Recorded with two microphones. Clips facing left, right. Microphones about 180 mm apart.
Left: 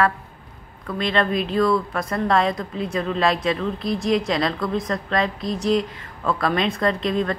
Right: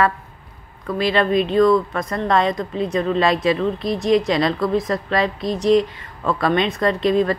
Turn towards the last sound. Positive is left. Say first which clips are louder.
# right 4 dB
turn(degrees=0)  # may be behind; listen again after turning